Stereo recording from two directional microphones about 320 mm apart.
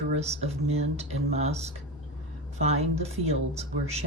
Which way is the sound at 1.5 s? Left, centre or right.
Centre.